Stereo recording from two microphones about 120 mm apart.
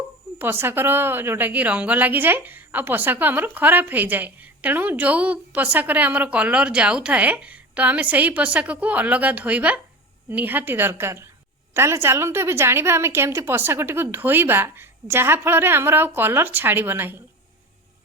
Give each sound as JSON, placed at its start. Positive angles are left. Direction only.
{"t": 0.3, "sound": "a woman's voice", "side_deg": -20}